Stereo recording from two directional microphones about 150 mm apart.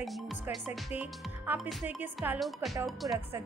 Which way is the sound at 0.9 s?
10° right (ahead or behind).